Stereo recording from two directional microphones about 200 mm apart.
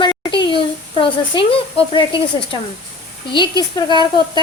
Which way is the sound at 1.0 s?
25° left (ahead or behind).